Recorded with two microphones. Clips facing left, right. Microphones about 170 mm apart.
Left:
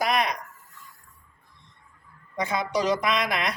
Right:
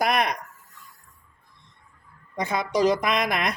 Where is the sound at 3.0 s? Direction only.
50° right (ahead or behind).